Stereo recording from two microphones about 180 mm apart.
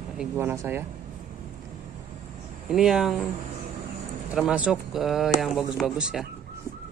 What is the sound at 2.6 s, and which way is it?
Speech, 5° right (ahead or behind).